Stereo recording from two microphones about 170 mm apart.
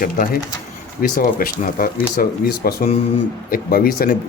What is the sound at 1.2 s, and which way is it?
Speech, 55° left (ahead or behind).